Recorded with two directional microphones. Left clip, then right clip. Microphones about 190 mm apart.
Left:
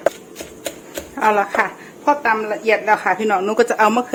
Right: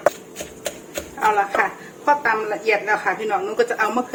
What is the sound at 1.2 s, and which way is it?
Speech, 55° left (ahead or behind).